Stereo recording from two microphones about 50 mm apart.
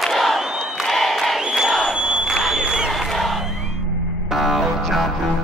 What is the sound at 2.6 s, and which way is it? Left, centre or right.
Crowd, centre.